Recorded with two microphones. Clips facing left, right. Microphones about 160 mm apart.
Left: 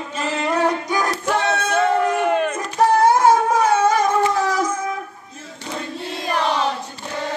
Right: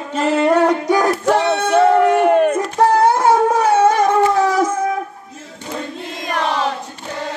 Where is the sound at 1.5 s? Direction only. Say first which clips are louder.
Right 5 dB; 70° right (ahead or behind); by 2.6 s 50° right (ahead or behind).